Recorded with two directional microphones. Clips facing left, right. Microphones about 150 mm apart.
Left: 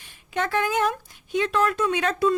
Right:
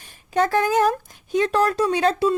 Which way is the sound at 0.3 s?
40° right (ahead or behind).